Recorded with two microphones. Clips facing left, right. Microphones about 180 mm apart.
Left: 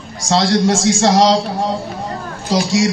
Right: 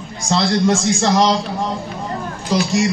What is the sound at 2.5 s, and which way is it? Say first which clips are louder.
Speech: left 2 dB; 90° left.